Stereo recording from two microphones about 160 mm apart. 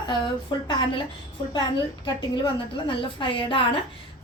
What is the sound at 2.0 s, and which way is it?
A woman's voice, 30° left (ahead or behind).